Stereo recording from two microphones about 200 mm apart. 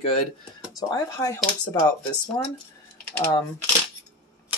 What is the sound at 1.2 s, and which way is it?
Speech, 20° left (ahead or behind).